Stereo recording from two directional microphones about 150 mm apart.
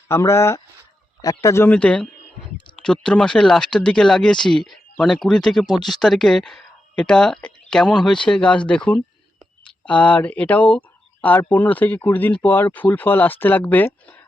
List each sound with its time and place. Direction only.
0.1 s speech: 20° left (ahead or behind)